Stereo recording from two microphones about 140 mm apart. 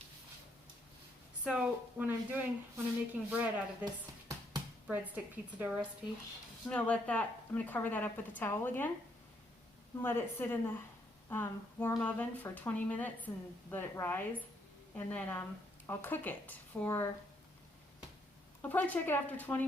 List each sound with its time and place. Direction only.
1.5 s speech: 5° right (ahead or behind)
4.9 s speech: 10° right (ahead or behind)
6.7 s speech: 10° left (ahead or behind)
10.0 s speech: 15° left (ahead or behind)
18.7 s speech: 10° left (ahead or behind)